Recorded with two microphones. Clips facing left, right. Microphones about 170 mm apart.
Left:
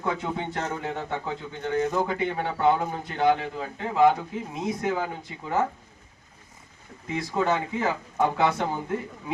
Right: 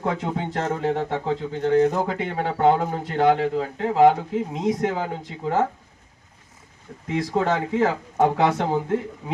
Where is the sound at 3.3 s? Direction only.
75° right (ahead or behind).